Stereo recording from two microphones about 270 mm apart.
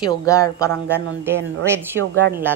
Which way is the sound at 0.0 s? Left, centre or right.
Centre.